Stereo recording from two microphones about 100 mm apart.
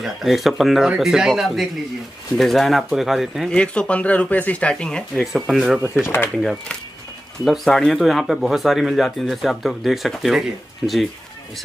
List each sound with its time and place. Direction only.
0.0 s speech: centre (ahead or behind)
3.5 s speech: 10° left (ahead or behind)
5.9 s speech: 20° left (ahead or behind)
7.4 s speech: centre (ahead or behind)
10.8 s speech: 15° left (ahead or behind)